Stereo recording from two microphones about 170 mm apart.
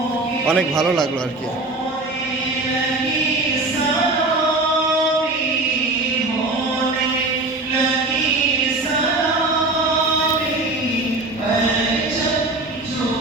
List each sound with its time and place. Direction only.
0.4 s a man's voice: centre (ahead or behind)